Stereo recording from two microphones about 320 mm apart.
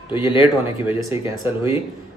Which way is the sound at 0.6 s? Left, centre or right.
Centre.